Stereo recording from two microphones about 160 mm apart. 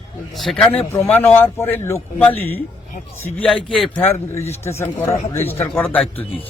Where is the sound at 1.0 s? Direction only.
10° left (ahead or behind).